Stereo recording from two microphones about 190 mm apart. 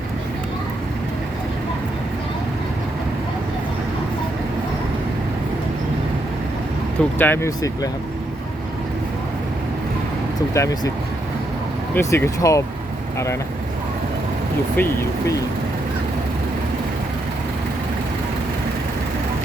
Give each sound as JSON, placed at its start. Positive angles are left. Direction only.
{"t": 7.2, "sound": "speech", "side_deg": 10}
{"t": 10.5, "sound": "speech", "side_deg": 15}
{"t": 11.9, "sound": "speech", "side_deg": 15}
{"t": 14.8, "sound": "speech", "side_deg": 10}